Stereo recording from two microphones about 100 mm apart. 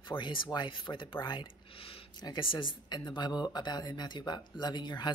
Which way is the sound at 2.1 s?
45° left (ahead or behind).